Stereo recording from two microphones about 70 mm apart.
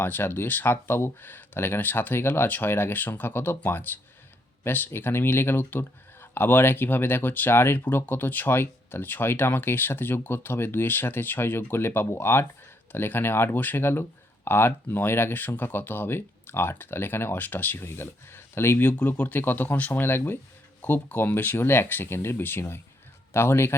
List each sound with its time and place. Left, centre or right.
0.0 s speech: left
19.0 s speech: left